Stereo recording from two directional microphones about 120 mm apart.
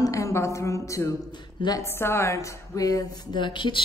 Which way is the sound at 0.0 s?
25° left (ahead or behind).